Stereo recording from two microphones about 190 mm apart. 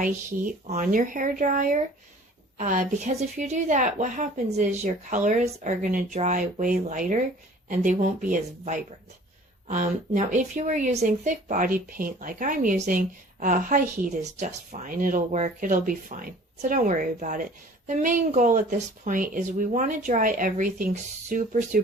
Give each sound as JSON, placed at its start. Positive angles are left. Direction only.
{"t": 0.0, "sound": "a woman's voice", "side_deg": -40}